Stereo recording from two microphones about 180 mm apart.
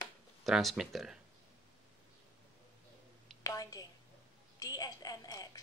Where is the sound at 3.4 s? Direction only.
20° left (ahead or behind).